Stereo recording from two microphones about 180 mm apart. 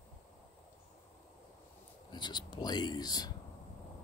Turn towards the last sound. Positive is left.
turn(degrees=20)  # may be behind; listen again after turning